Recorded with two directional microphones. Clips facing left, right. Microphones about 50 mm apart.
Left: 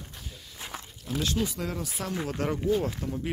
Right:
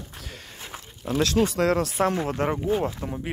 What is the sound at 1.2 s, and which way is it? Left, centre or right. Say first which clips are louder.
Speech: right 8 dB; right.